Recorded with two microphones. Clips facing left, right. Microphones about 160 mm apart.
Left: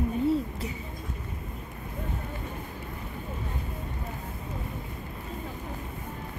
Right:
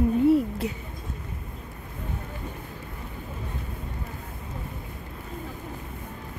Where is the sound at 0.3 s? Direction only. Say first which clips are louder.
Right 6 dB; 70° right (ahead or behind).